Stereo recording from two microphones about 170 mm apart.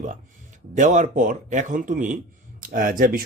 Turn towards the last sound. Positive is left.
turn(degrees=-55)  # may be behind; listen again after turning